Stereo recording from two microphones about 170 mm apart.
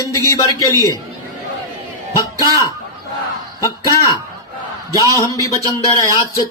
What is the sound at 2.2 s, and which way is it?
A man's voice, 20° left (ahead or behind).